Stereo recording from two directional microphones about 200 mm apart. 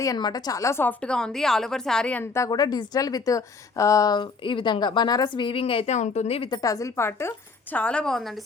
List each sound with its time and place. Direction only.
0.0 s a woman's voice: 20° left (ahead or behind); by 8.4 s centre (ahead or behind)